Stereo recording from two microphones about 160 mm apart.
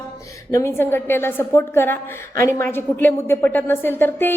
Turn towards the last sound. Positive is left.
turn(degrees=15)  # may be behind; listen again after turning